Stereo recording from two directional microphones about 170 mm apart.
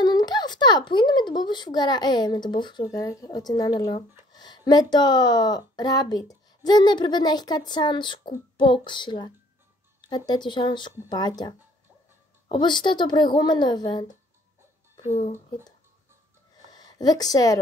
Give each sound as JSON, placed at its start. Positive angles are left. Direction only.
{"t": 0.0, "sound": "speech", "side_deg": 25}
{"t": 16.7, "sound": "a woman's voice", "side_deg": 25}